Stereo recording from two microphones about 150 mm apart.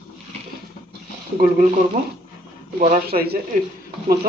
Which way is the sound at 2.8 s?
75° right (ahead or behind).